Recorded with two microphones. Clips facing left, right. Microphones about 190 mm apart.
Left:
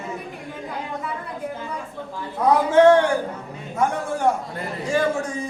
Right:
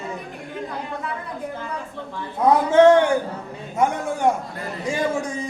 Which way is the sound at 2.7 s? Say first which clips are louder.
Right 1 dB; 20° right (ahead or behind).